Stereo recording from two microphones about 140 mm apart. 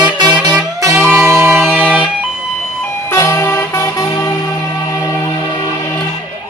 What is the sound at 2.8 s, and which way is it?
Music, 20° left (ahead or behind).